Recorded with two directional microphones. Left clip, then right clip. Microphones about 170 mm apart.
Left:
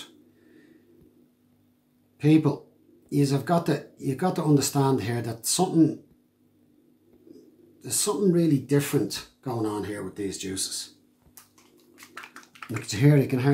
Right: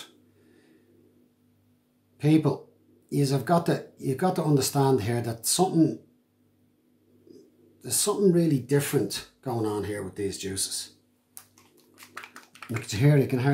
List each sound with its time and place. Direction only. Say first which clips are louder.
2.1 s speech: left 2 dB; 10° right (ahead or behind)
7.8 s speech: right 1 dB; 10° right (ahead or behind)
12.1 s a sound: even; 20° right (ahead or behind)
12.8 s speech: left 2 dB; 5° right (ahead or behind)